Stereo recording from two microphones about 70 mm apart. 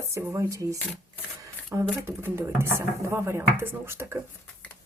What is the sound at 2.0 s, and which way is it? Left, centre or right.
Speech, right.